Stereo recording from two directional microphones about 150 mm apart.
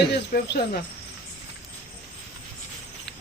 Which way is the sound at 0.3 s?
70° left (ahead or behind).